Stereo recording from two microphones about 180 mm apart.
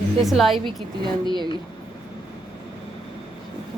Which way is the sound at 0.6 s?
25° right (ahead or behind).